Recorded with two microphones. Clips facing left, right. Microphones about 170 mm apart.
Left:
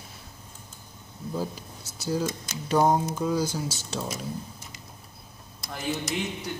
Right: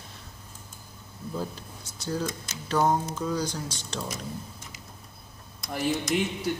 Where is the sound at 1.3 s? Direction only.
10° left (ahead or behind).